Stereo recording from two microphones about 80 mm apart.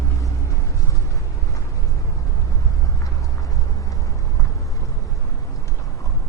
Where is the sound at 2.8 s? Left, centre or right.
Left.